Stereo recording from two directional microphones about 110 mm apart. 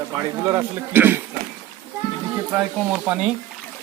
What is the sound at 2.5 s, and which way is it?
Speech, 10° right (ahead or behind).